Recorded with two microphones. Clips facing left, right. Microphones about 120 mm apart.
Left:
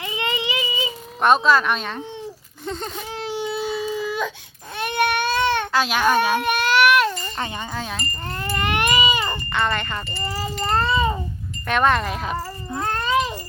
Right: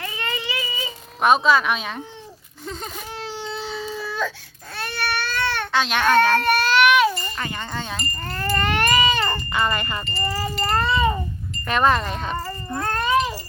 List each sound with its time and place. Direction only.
0.0 s a sound: 20° left (ahead or behind)
1.2 s speech: centre (ahead or behind)
3.2 s baby cry: 15° left (ahead or behind)
5.7 s baby cry: 5° left (ahead or behind)
7.7 s speech: centre (ahead or behind)
8.3 s baby cry: 15° left (ahead or behind)
9.5 s speech: 5° right (ahead or behind)
10.2 s sheep: 20° left (ahead or behind)
10.7 s babbling: 25° left (ahead or behind)
11.7 s speech: centre (ahead or behind)